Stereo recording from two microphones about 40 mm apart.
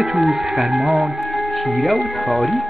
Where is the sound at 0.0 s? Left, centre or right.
Centre.